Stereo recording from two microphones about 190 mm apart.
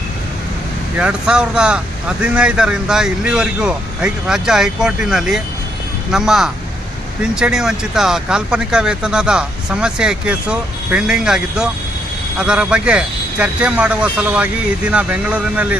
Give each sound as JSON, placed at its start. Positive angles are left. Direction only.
{"t": 0.9, "sound": "speech", "side_deg": -5}